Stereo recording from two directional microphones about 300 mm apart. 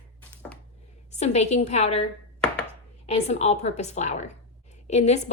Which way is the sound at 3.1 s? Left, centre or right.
Left.